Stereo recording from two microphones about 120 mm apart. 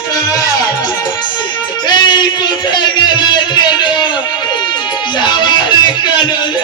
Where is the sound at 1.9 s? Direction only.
35° left (ahead or behind).